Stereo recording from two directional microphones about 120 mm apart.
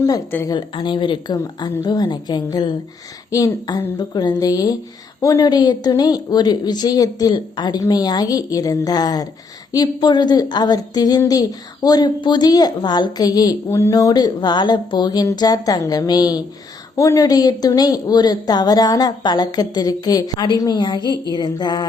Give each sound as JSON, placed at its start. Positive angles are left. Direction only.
{"t": 0.4, "sound": "a woman's voice", "side_deg": 40}
{"t": 3.9, "sound": "a woman's voice", "side_deg": 35}